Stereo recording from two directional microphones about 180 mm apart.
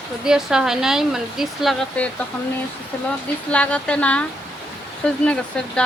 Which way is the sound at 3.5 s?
5° left (ahead or behind).